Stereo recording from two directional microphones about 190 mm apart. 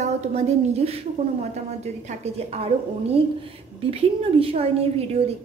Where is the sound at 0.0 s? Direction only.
35° right (ahead or behind).